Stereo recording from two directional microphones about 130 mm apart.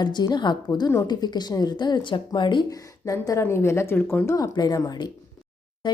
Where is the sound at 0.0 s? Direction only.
35° left (ahead or behind); by 4.4 s 15° left (ahead or behind).